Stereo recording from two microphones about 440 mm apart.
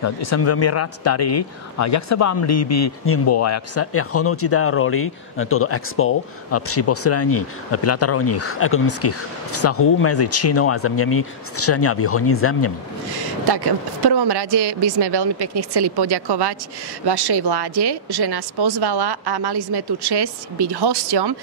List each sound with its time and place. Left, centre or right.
0.0 s speech: left
13.5 s speech: right